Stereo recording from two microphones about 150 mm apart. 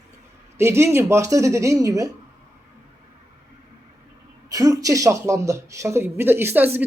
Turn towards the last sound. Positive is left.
turn(degrees=-10)  # may be behind; listen again after turning